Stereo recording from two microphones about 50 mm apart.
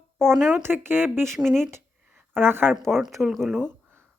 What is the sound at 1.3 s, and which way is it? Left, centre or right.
Speech, centre.